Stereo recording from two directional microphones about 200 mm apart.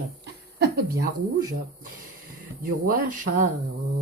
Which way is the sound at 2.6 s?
45° right (ahead or behind).